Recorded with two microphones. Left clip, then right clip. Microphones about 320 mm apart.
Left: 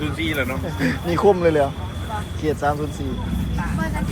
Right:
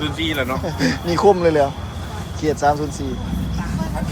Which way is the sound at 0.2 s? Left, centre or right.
Right.